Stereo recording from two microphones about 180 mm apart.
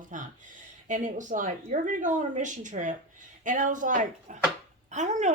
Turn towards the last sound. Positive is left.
turn(degrees=-40)  # may be behind; listen again after turning